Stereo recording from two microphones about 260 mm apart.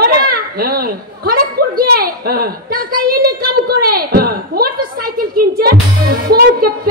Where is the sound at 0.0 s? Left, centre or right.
Right.